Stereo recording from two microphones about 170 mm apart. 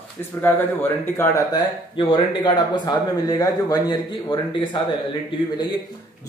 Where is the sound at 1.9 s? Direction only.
30° left (ahead or behind).